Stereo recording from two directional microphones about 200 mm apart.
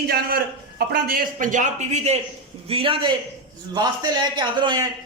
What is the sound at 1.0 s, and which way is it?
A man's voice, 45° right (ahead or behind).